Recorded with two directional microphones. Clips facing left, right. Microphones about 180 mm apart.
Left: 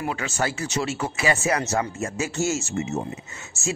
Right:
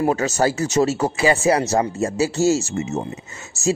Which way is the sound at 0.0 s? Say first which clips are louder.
Right 8 dB; 40° right (ahead or behind).